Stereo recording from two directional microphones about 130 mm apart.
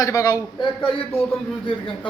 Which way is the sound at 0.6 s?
40° left (ahead or behind).